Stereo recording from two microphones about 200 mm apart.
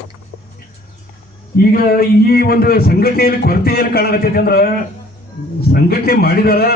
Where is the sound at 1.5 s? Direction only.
50° left (ahead or behind).